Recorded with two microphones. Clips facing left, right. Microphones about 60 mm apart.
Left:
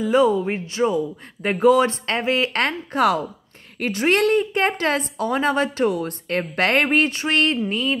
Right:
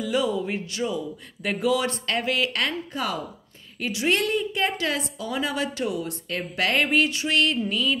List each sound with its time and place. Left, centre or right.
0.0 s speech: left
2.6 s speech: left
3.8 s a woman's voice: left